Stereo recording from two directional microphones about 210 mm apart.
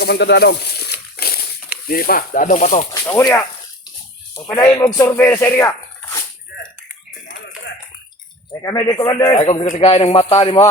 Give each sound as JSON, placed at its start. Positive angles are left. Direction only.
{"t": 0.0, "sound": "a sound", "side_deg": 50}
{"t": 1.9, "sound": "speech", "side_deg": 45}
{"t": 2.9, "sound": "speech", "side_deg": 15}
{"t": 4.5, "sound": "a man's voice", "side_deg": 15}
{"t": 8.6, "sound": "a man's voice", "side_deg": 20}
{"t": 9.7, "sound": "a man's voice", "side_deg": 30}